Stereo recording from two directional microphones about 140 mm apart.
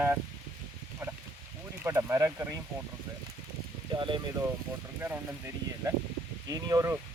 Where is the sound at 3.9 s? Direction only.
35° right (ahead or behind).